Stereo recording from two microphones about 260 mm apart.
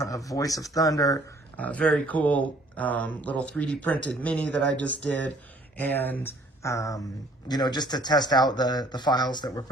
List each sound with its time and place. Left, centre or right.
0.3 s speech: centre